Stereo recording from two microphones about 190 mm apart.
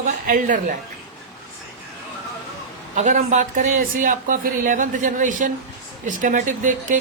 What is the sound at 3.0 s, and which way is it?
Speech, 40° right (ahead or behind).